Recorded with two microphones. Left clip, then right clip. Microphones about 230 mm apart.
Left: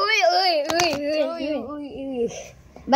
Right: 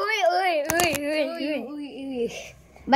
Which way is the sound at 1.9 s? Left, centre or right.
Left.